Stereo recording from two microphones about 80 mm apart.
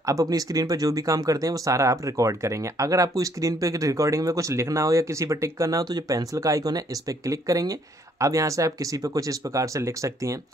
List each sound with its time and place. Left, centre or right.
0.0 s speech: right